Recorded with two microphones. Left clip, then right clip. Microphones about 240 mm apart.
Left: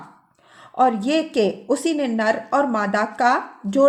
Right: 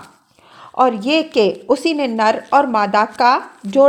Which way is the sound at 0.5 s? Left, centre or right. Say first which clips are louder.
Right 3 dB; centre.